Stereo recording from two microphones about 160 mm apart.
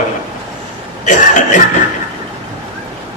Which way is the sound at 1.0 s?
50° left (ahead or behind).